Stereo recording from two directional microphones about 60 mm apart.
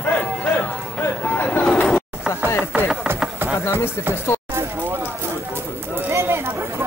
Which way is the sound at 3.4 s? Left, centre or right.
Right.